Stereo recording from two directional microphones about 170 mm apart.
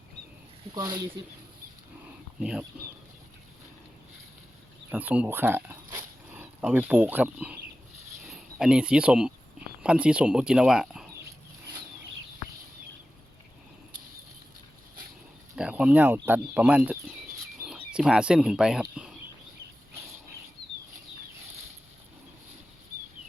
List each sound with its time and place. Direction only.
0.7 s speech: 25° right (ahead or behind)
2.4 s speech: 5° right (ahead or behind)
4.9 s speech: 10° right (ahead or behind)
6.0 s zipper: 10° right (ahead or behind)
8.3 s speech: 5° right (ahead or behind)
15.5 s speech: 5° right (ahead or behind)
17.6 s a sound: 5° right (ahead or behind)